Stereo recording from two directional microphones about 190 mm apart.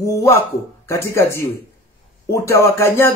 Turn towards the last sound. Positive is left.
turn(degrees=15)  # may be behind; listen again after turning